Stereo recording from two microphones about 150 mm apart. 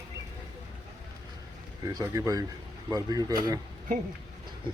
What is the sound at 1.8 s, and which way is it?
Speech, 25° right (ahead or behind).